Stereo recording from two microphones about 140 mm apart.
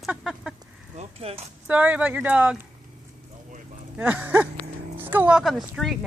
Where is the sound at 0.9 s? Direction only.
50° right (ahead or behind).